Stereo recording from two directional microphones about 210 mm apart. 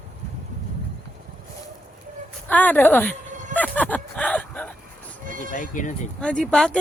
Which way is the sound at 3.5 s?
5° left (ahead or behind).